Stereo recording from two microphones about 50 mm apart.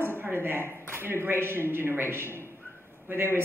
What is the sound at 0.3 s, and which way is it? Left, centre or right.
A woman's voice, right.